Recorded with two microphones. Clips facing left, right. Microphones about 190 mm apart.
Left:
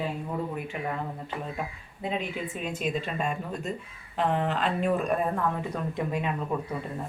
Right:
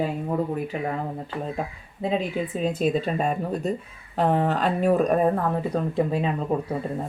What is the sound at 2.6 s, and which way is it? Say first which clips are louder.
Speech: right 8 dB; 35° right (ahead or behind).